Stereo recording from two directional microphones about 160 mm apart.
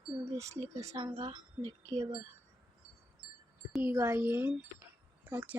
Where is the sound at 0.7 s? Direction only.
20° right (ahead or behind).